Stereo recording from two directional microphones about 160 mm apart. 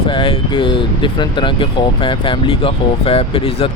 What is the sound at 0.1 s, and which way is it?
Speech, 30° left (ahead or behind).